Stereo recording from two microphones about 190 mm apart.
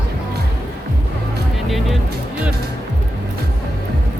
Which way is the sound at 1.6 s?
Centre (ahead or behind).